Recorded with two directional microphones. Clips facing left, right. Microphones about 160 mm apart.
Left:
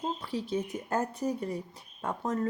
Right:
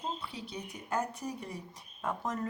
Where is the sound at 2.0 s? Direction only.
25° left (ahead or behind).